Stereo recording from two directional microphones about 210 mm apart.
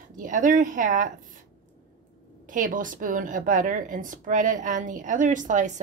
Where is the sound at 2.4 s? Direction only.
40° right (ahead or behind).